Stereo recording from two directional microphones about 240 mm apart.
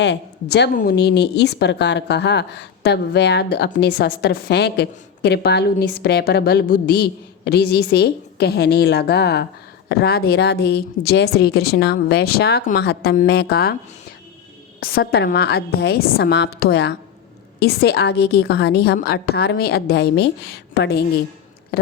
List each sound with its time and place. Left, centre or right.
0.0 s a woman's voice: left
14.8 s a woman's voice: left
21.7 s a sound: left